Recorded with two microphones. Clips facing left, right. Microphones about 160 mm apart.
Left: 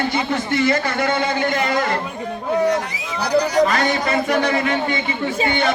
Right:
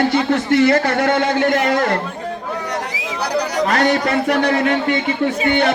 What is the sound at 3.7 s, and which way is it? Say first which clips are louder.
Speech: right 3 dB; 70° right (ahead or behind).